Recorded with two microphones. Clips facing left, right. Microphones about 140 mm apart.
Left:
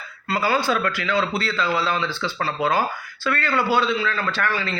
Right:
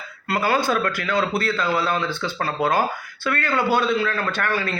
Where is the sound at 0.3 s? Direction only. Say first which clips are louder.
Right 1 dB; 55° right (ahead or behind).